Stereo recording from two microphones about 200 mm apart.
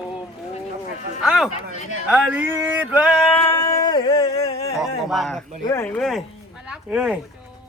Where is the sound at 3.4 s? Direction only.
15° left (ahead or behind); by 4.7 s 30° left (ahead or behind).